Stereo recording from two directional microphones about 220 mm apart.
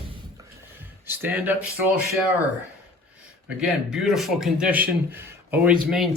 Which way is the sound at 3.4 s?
5° right (ahead or behind).